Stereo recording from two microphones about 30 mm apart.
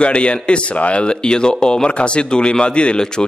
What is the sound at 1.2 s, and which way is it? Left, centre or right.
Speech, left.